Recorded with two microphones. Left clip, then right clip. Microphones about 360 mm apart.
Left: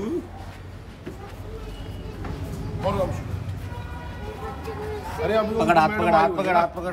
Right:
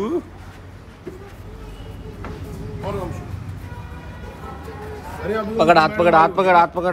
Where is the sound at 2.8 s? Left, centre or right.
Centre.